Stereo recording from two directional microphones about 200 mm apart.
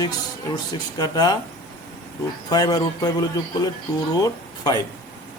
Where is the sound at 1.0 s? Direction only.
20° left (ahead or behind).